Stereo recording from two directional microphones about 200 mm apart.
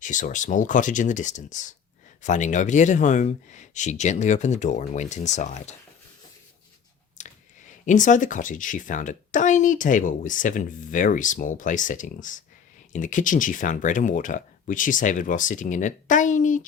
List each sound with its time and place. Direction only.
0.0 s speech: 40° left (ahead or behind)
7.2 s squish: 35° left (ahead or behind)
7.9 s speech: 40° left (ahead or behind)